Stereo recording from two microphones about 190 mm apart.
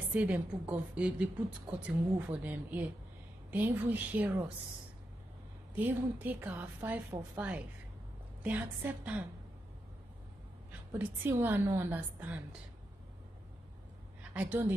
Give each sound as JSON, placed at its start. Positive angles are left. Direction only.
{"t": 0.1, "sound": "a woman's voice", "side_deg": -5}
{"t": 5.8, "sound": "a woman's voice", "side_deg": -10}
{"t": 10.9, "sound": "a woman's voice", "side_deg": -10}
{"t": 14.3, "sound": "a woman's voice", "side_deg": -10}